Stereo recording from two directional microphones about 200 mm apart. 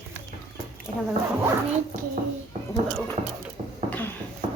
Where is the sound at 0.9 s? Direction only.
5° left (ahead or behind).